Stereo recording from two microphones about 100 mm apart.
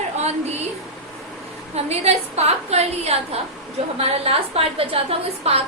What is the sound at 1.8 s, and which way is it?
A woman's voice, 90° right.